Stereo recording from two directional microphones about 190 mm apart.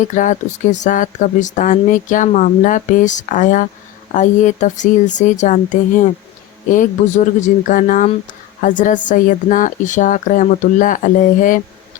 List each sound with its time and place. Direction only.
0.0 s speech: 40° left (ahead or behind)